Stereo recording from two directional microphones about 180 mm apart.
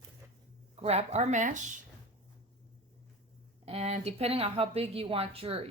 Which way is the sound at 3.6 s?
35° right (ahead or behind).